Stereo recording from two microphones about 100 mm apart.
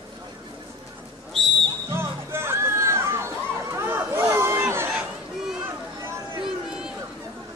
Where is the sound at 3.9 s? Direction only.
25° right (ahead or behind).